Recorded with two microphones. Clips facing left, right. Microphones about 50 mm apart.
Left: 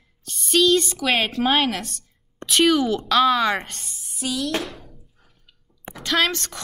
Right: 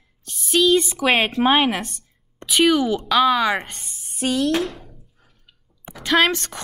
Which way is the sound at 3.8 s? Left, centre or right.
Right.